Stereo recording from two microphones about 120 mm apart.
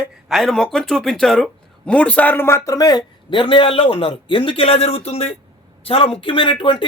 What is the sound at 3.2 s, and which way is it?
A woman's voice, 45° left (ahead or behind).